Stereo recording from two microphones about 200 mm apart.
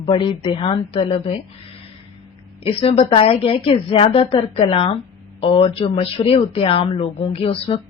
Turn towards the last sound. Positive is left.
turn(degrees=30)  # may be behind; listen again after turning